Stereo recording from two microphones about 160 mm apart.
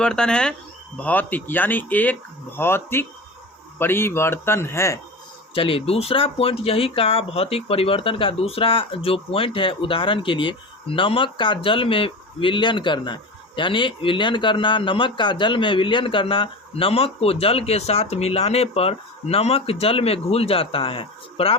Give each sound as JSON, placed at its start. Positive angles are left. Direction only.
{"t": 0.0, "sound": "speech", "side_deg": 5}
{"t": 5.5, "sound": "speech", "side_deg": 35}